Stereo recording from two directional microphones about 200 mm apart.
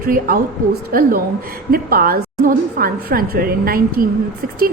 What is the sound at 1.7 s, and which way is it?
A woman's voice, 50° right (ahead or behind).